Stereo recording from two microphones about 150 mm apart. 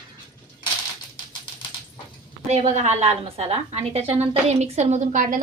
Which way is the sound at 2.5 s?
50° right (ahead or behind).